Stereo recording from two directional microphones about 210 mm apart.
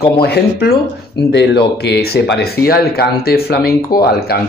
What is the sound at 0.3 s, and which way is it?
Speech, 45° left (ahead or behind).